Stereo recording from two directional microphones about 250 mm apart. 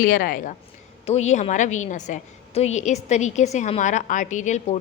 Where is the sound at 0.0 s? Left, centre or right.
Left.